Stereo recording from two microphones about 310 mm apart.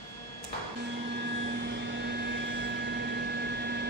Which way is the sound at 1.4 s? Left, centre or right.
Right.